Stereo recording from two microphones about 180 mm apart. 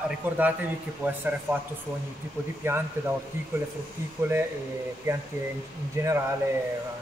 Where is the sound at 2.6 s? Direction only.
15° right (ahead or behind).